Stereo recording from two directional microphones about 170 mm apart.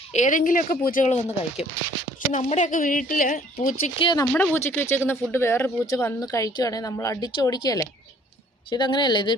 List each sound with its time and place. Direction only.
0.1 s speech: 45° left (ahead or behind)
3.9 s speech: 30° left (ahead or behind)
4.3 s speech: 10° left (ahead or behind)